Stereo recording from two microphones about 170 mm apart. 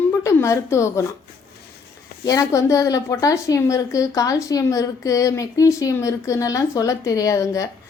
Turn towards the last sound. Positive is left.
turn(degrees=20)  # may be behind; listen again after turning